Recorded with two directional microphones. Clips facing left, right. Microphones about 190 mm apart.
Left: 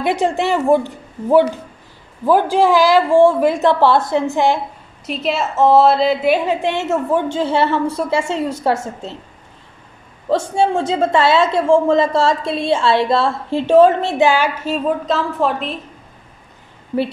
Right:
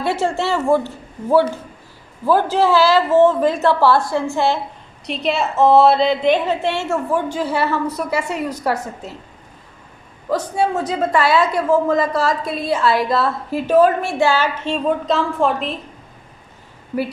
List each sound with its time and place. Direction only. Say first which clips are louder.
0.0 s a woman's voice: left 2 dB; 15° left (ahead or behind)
5.0 s a woman's voice: even; centre (ahead or behind); by 9.1 s 25° left (ahead or behind)
10.3 s a woman's voice: left 3 dB; 25° left (ahead or behind); by 15.8 s centre (ahead or behind)